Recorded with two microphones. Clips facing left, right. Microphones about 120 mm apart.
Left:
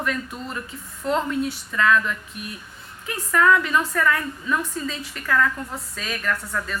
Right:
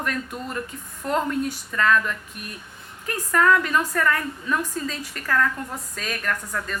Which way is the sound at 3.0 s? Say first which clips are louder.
Left 1 dB; 40° right (ahead or behind).